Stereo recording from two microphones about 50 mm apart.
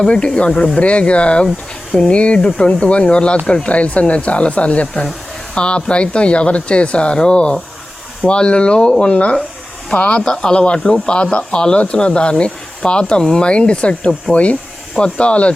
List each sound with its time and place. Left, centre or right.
0.3 s speech: left